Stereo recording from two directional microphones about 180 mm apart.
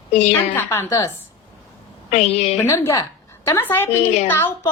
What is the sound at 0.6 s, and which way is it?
Speech, 15° left (ahead or behind).